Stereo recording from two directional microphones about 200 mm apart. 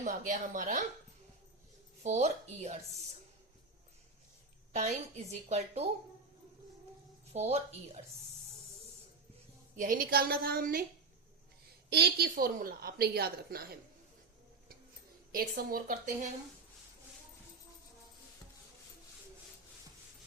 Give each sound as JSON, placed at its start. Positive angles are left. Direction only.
{"t": 0.0, "sound": "a woman's voice", "side_deg": -40}
{"t": 2.0, "sound": "a woman's voice", "side_deg": -35}
{"t": 4.7, "sound": "a woman's voice", "side_deg": -35}
{"t": 7.3, "sound": "a woman's voice", "side_deg": -35}
{"t": 9.7, "sound": "a woman's voice", "side_deg": -45}
{"t": 11.9, "sound": "a woman's voice", "side_deg": -55}
{"t": 15.3, "sound": "a woman's voice", "side_deg": -45}